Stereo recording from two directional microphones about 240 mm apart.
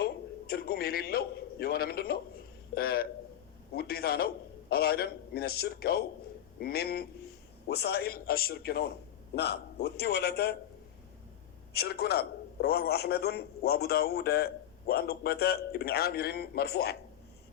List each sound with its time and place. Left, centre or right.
0.0 s a man's voice: left
11.7 s a man's voice: left